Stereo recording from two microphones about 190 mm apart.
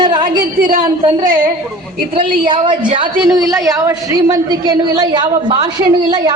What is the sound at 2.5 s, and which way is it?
A woman's voice, 25° right (ahead or behind).